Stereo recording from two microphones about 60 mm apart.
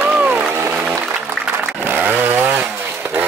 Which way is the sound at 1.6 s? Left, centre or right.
Right.